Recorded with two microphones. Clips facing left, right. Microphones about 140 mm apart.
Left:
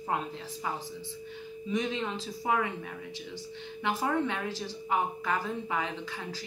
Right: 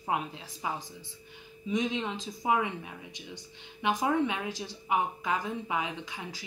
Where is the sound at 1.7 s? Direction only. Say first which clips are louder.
Right 1 dB; 20° right (ahead or behind).